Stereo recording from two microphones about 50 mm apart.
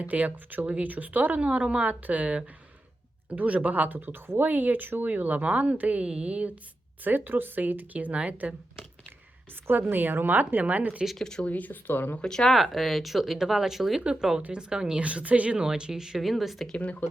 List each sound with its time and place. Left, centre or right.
0.0 s speech: right
1.4 s speech: right
7.0 s speech: right
9.9 s speech: right
11.2 s speech: centre
11.4 s speech: left
12.2 s speech: centre
12.5 s speech: centre
14.5 s speech: centre
15.0 s speech: right
15.5 s speech: centre
16.7 s speech: left